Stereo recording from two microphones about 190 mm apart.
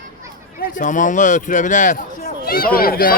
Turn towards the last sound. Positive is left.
turn(degrees=50)  # may be behind; listen again after turning